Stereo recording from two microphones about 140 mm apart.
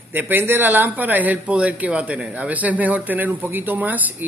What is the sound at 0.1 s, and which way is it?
A man's voice, 15° right (ahead or behind).